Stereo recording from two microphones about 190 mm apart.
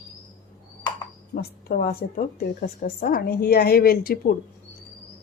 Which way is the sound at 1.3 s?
55° left (ahead or behind).